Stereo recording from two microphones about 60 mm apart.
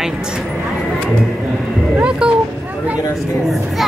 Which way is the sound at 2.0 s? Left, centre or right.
Centre.